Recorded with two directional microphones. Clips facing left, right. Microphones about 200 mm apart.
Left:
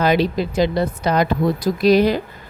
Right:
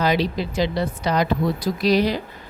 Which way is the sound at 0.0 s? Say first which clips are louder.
Left 4 dB; 55° left (ahead or behind).